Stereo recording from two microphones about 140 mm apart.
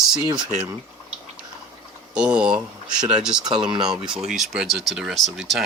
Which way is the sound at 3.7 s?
30° right (ahead or behind).